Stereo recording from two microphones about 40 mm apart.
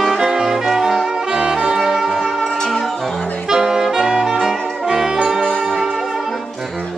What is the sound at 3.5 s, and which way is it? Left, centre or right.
Saxophone, centre.